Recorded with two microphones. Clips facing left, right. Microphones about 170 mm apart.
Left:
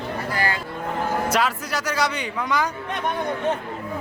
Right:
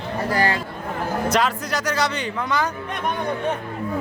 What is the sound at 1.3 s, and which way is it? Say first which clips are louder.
Speech: right 2 dB; 5° left (ahead or behind).